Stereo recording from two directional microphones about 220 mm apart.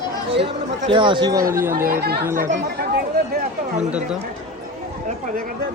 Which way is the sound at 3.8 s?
5° right (ahead or behind).